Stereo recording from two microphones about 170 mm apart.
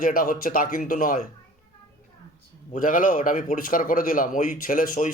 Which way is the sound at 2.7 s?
50° left (ahead or behind).